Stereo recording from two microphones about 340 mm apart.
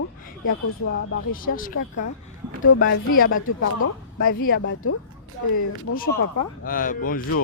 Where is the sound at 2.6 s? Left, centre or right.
Left.